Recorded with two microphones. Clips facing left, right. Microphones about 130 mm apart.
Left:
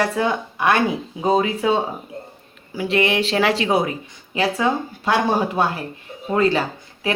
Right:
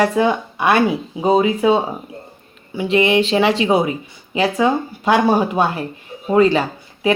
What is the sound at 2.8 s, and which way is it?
Speech, centre (ahead or behind).